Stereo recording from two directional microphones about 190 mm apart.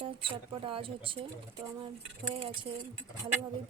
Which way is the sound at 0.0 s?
25° right (ahead or behind).